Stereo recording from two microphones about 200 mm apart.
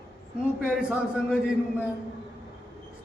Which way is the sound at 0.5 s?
5° right (ahead or behind).